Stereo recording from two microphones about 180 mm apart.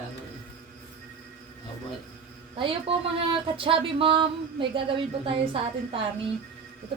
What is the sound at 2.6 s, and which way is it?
Speech, 30° right (ahead or behind).